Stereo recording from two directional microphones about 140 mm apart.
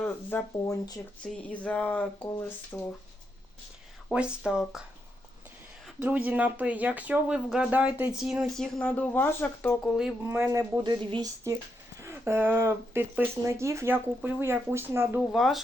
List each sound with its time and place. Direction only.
0.0 s speech: 15° left (ahead or behind)
0.6 s speech: 25° left (ahead or behind)
1.5 s speech: 10° left (ahead or behind)
4.1 s speech: 5° right (ahead or behind)
6.0 s speech: 10° right (ahead or behind); by 10.0 s 5° left (ahead or behind)
10.2 s speech: 15° right (ahead or behind)
11.9 s speech: 20° right (ahead or behind)
15.3 s speech: centre (ahead or behind)